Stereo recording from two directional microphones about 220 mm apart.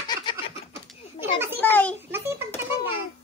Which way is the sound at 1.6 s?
10° left (ahead or behind).